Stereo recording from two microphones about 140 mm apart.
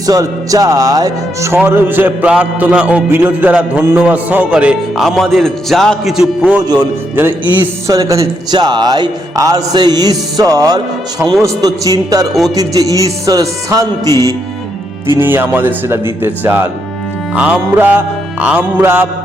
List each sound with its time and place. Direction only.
0.0 s speech: 25° right (ahead or behind)
1.6 s music: 15° right (ahead or behind)
5.0 s a man's voice: centre (ahead or behind); by 14.1 s 25° right (ahead or behind)
14.1 s music: 20° left (ahead or behind)
15.2 s music: 15° right (ahead or behind)